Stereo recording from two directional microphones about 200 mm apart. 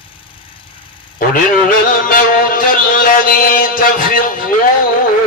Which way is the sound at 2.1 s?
45° left (ahead or behind).